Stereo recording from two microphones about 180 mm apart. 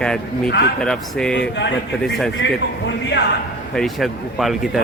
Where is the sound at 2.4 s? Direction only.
90° left.